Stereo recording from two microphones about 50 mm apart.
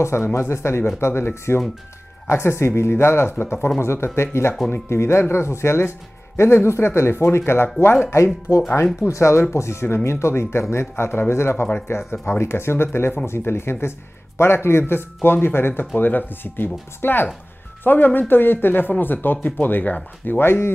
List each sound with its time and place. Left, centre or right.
0.0 s speech: left
8.5 s speech: left
9.0 s speech: left